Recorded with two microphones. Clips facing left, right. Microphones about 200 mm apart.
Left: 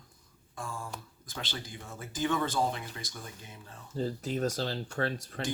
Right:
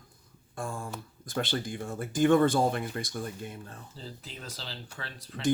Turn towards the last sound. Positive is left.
turn(degrees=50)  # may be behind; listen again after turning